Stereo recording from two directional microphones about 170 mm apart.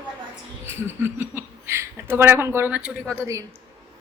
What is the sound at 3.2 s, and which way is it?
Speech, 20° right (ahead or behind).